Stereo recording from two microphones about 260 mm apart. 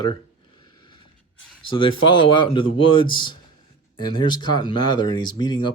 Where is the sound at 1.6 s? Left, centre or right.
Centre.